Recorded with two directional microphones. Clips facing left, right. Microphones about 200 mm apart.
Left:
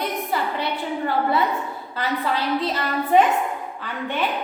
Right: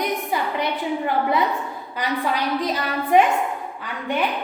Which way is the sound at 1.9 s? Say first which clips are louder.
Even; 15° right (ahead or behind).